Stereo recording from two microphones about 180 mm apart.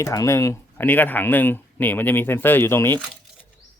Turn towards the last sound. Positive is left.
turn(degrees=10)  # may be behind; listen again after turning